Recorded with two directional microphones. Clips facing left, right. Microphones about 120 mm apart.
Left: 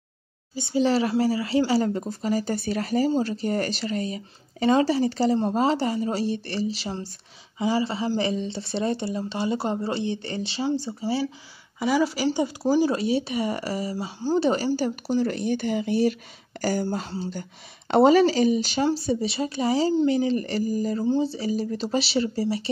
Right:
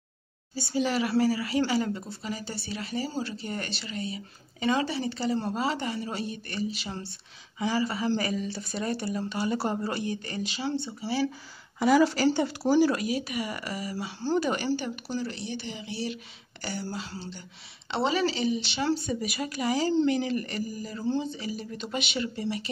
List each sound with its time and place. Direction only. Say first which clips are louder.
0.6 s speech: left 5 dB; 25° left (ahead or behind)
1.7 s speech: left 5 dB; 40° left (ahead or behind)
7.5 s speech: left 4 dB; 25° left (ahead or behind)
11.8 s speech: right 1 dB; 5° left (ahead or behind)
12.4 s speech: left 3 dB; 15° left (ahead or behind)
12.9 s speech: left 5 dB; 30° left (ahead or behind)
18.9 s speech: left 6 dB; 30° left (ahead or behind)